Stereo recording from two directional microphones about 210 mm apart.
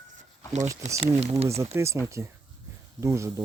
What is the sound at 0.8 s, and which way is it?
Speech, 30° right (ahead or behind).